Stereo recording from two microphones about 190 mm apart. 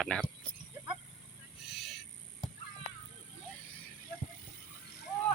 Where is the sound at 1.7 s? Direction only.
Centre (ahead or behind).